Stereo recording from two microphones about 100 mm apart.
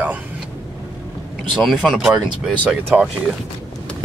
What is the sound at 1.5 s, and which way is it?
Speech, centre (ahead or behind).